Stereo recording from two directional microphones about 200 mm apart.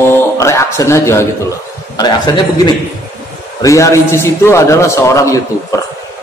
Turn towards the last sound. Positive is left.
turn(degrees=15)  # may be behind; listen again after turning